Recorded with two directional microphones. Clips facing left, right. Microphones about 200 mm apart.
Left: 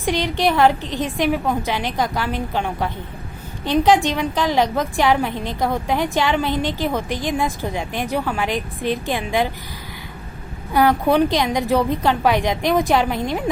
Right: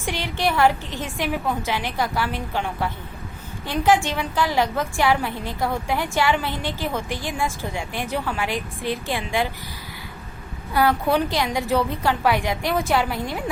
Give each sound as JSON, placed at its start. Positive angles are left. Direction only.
{"t": 0.0, "sound": "a woman's voice", "side_deg": 20}
{"t": 10.8, "sound": "a woman's voice", "side_deg": 20}